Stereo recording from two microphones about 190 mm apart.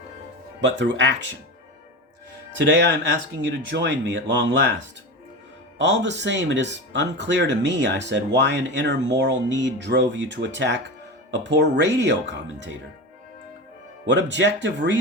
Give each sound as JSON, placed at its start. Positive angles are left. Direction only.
{"t": 0.6, "sound": "speech", "side_deg": -70}
{"t": 2.6, "sound": "speech", "side_deg": -65}
{"t": 5.8, "sound": "speech", "side_deg": -70}
{"t": 14.1, "sound": "speech", "side_deg": -70}